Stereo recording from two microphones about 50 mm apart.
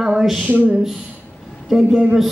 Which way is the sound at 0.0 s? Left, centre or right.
Centre.